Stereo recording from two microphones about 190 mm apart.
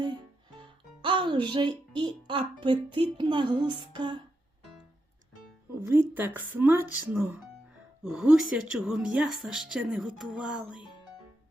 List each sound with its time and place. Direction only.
0.6 s music: 25° right (ahead or behind)
2.0 s a child's voice: 25° right (ahead or behind)
5.8 s a woman's voice: 10° right (ahead or behind)